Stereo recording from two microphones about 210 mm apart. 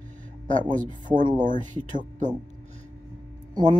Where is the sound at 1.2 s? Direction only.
20° right (ahead or behind).